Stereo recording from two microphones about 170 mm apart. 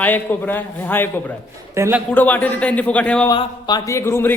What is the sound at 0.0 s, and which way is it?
A man's voice, 10° left (ahead or behind).